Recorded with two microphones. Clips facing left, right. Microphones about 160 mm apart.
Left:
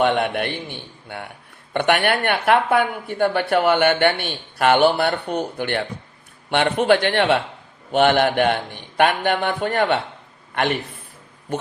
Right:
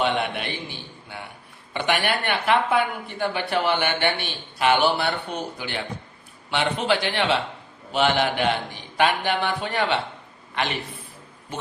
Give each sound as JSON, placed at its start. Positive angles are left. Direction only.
{"t": 0.0, "sound": "a man's voice", "side_deg": 55}